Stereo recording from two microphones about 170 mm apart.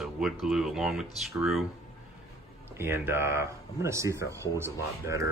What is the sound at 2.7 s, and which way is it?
Speech, 15° right (ahead or behind).